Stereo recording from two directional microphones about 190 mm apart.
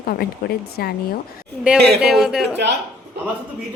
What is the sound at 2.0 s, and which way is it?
Speech, 5° right (ahead or behind).